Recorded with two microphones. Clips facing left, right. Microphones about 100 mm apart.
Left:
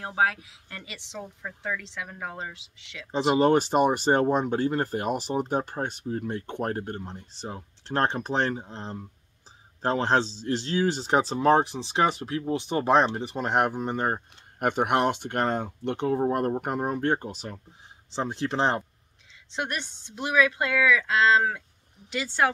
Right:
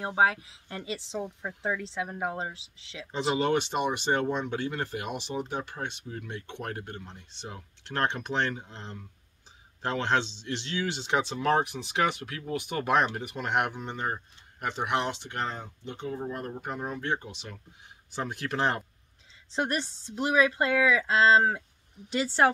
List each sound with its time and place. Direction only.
0.0 s speech: 25° right (ahead or behind)
3.1 s speech: 30° left (ahead or behind); by 16.2 s 70° left (ahead or behind)
16.2 s speech: 60° left (ahead or behind); by 17.6 s 40° left (ahead or behind)
18.1 s speech: 25° left (ahead or behind)
19.5 s speech: 30° right (ahead or behind)